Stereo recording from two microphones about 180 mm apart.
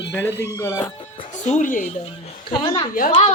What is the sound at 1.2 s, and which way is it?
Music, 40° left (ahead or behind).